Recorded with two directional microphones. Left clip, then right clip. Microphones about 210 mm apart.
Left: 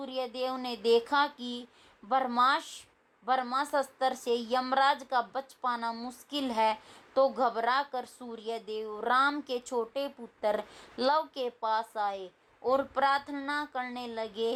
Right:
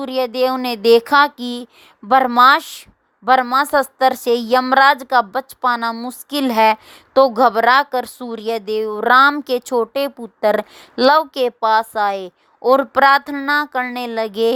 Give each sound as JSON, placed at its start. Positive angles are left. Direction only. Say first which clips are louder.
{"t": 0.0, "sound": "a woman's voice", "louder": "right 16 dB", "side_deg": -50}